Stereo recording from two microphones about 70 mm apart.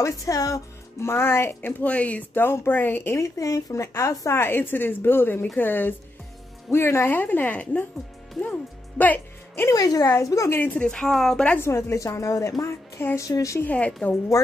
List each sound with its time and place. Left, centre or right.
0.0 s speech: left
2.4 s speech: left
3.3 s a woman's voice: left
4.4 s speech: left
9.7 s a woman's voice: left
10.5 s speech: left
10.8 s speech: centre
11.5 s a woman's voice: left
13.7 s speech: centre